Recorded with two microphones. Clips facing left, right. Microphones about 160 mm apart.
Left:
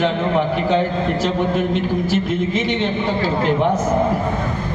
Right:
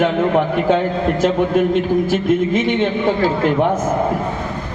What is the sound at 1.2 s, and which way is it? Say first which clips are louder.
A man's voice: right 6 dB; 50° right (ahead or behind).